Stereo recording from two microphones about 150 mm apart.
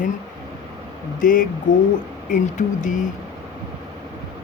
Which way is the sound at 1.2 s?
65° left (ahead or behind).